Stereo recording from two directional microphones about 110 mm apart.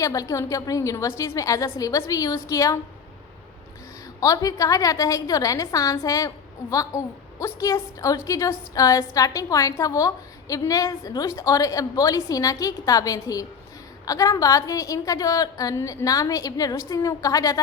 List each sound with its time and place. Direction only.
0.0 s a woman's voice: 30° left (ahead or behind)
4.2 s a woman's voice: 35° left (ahead or behind)